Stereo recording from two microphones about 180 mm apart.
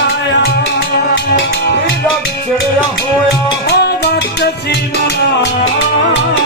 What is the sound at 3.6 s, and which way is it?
Music, 65° left (ahead or behind).